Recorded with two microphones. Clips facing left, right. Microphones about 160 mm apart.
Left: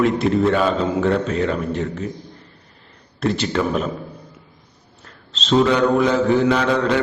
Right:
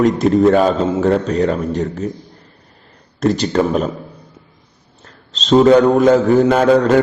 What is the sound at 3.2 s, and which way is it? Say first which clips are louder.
Speech: right 5 dB; 40° right (ahead or behind).